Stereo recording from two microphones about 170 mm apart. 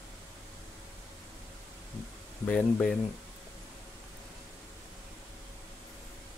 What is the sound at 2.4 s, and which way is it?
Speech, 5° left (ahead or behind).